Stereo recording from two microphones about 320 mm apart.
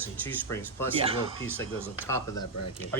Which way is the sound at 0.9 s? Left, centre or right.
Centre.